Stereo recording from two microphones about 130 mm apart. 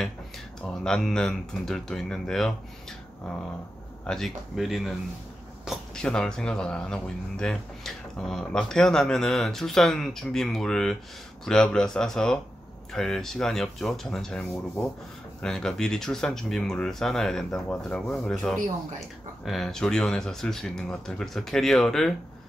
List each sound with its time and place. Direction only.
0.7 s speech: 5° left (ahead or behind)
4.0 s speech: 5° left (ahead or behind)